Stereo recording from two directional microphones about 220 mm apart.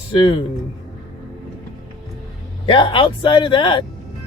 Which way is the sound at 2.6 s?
25° left (ahead or behind).